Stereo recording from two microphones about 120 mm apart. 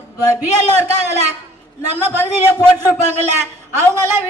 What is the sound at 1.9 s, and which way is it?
A man's voice, 20° right (ahead or behind).